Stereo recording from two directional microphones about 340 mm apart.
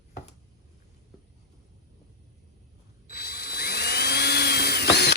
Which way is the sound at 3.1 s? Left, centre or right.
Left.